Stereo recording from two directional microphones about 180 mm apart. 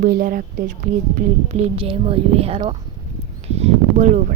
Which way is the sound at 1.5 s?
35° right (ahead or behind).